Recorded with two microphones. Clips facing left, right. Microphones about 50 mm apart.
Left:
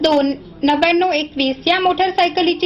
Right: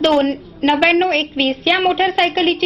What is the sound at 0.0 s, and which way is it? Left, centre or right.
A woman's voice, right.